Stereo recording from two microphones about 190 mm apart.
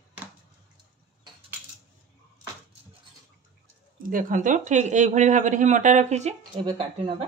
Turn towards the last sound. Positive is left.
turn(degrees=-30)  # may be behind; listen again after turning